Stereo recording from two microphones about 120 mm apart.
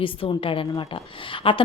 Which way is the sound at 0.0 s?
45° left (ahead or behind).